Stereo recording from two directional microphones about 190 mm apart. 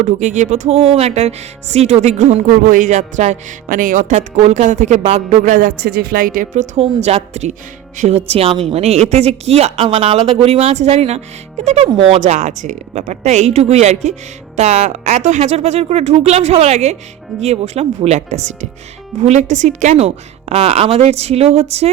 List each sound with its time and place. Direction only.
0.0 s speech: 40° right (ahead or behind)
5.5 s a woman's voice: 50° right (ahead or behind); by 21.8 s 35° right (ahead or behind)